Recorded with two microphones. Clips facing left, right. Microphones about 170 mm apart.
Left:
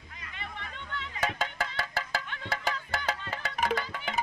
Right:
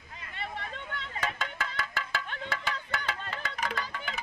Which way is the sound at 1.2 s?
40° left (ahead or behind).